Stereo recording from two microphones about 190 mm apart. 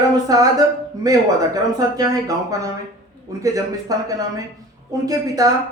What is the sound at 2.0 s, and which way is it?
A man's voice, 20° right (ahead or behind).